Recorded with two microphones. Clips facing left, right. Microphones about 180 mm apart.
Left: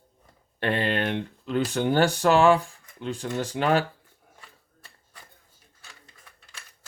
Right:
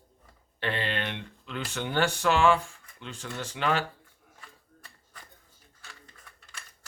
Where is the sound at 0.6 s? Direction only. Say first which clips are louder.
Left 6 dB; 45° left (ahead or behind).